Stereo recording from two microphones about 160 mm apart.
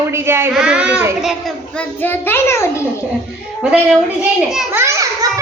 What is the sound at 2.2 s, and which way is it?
Speech, 15° left (ahead or behind).